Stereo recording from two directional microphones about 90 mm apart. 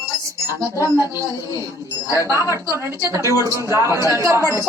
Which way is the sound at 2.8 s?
35° right (ahead or behind).